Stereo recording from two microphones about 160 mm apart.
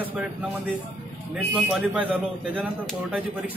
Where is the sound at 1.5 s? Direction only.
5° right (ahead or behind).